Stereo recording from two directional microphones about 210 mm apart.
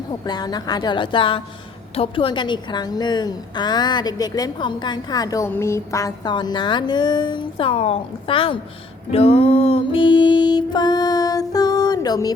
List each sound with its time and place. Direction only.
0.1 s a woman's voice: 20° left (ahead or behind)
9.1 s music: 30° left (ahead or behind)